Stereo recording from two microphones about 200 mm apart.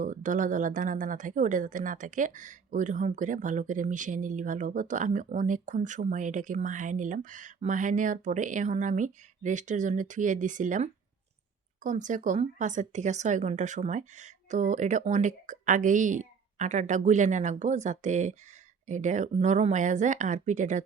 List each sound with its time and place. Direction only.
0.0 s speech: 40° right (ahead or behind)